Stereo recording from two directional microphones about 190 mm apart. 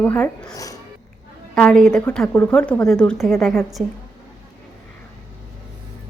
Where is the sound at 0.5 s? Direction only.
20° left (ahead or behind).